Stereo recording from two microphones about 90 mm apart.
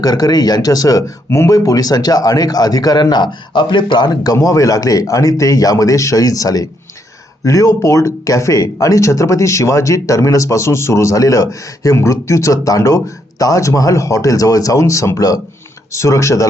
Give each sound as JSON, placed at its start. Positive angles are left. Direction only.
{"t": 0.0, "sound": "speech", "side_deg": 45}